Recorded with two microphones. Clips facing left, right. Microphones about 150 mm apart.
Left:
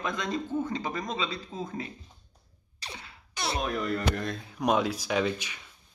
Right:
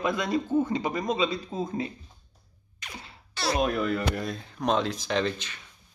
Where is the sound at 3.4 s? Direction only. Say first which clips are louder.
Right 3 dB; 15° left (ahead or behind).